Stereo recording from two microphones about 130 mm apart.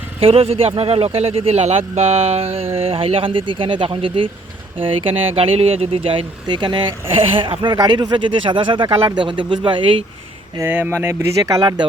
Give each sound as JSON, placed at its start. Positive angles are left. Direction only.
{"t": 0.2, "sound": "speech", "side_deg": -45}
{"t": 10.6, "sound": "speech", "side_deg": -15}